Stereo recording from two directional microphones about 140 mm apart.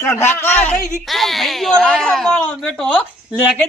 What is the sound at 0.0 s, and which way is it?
Speech, 20° left (ahead or behind).